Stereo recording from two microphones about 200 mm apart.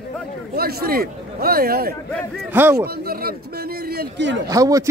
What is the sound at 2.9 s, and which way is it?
A man's voice, 50° right (ahead or behind).